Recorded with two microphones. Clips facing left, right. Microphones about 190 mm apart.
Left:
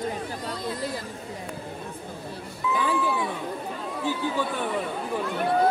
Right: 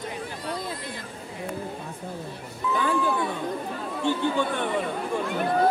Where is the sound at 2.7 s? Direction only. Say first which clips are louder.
Right 1 dB; 5° left (ahead or behind).